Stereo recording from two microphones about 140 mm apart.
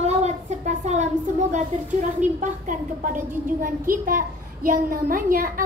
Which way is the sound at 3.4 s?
80° right.